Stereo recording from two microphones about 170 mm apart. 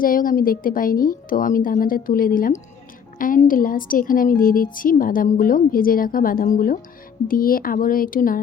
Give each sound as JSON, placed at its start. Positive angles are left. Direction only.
{"t": 0.0, "sound": "a woman's voice", "side_deg": 55}